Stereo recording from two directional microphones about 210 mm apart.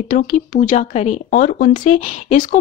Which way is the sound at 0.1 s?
40° left (ahead or behind).